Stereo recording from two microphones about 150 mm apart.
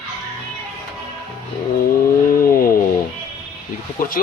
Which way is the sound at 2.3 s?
70° left (ahead or behind).